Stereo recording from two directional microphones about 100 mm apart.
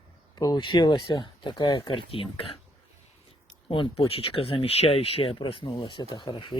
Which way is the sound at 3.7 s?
65° left (ahead or behind).